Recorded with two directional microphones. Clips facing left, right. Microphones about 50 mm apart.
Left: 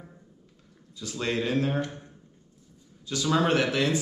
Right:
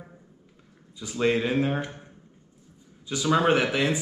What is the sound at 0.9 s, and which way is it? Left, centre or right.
Speech, centre.